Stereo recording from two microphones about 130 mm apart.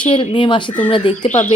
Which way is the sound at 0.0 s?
40° left (ahead or behind).